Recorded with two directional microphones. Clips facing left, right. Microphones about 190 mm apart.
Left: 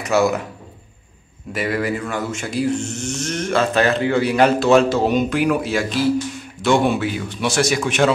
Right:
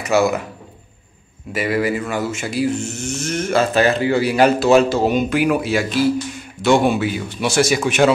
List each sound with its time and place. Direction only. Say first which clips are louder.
0.0 s speech: right 1 dB; centre (ahead or behind)
1.5 s speech: right 2 dB; 5° right (ahead or behind)